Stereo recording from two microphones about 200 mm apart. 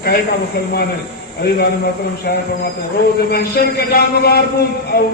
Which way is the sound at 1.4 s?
55° left (ahead or behind).